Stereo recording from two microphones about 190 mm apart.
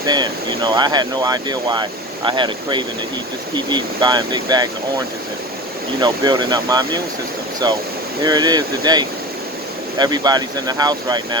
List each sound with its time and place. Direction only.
0.0 s speech: 20° right (ahead or behind)
6.0 s speech: 25° right (ahead or behind)